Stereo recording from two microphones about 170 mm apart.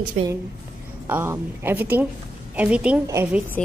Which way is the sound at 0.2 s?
45° right (ahead or behind).